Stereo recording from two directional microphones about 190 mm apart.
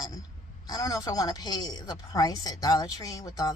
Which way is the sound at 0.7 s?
20° left (ahead or behind).